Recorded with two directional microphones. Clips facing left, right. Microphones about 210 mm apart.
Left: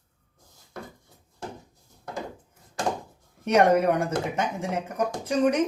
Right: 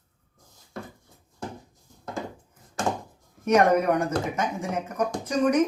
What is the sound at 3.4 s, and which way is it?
Speech, 30° left (ahead or behind).